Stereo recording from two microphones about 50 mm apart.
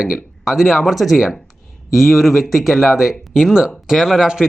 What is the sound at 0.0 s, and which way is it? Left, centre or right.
Speech, centre.